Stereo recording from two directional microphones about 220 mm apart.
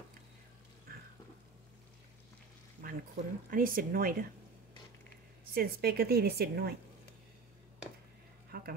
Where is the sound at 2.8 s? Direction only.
40° right (ahead or behind).